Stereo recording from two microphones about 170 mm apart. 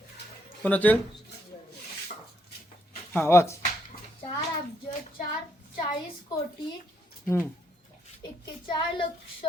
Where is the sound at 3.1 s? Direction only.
15° left (ahead or behind).